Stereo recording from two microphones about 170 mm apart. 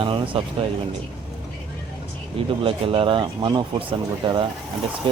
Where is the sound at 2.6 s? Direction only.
30° right (ahead or behind).